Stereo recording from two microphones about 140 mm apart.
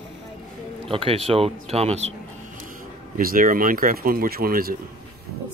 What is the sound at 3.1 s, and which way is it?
Speech, 85° right.